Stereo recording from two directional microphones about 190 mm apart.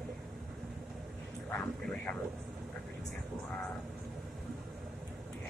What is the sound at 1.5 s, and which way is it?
Speech, 5° left (ahead or behind).